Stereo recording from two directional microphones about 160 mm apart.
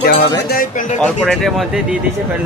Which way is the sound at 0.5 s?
60° left (ahead or behind).